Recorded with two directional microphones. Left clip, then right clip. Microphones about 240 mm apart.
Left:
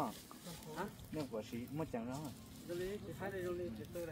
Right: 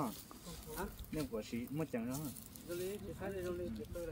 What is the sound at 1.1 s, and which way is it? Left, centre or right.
Speech, right.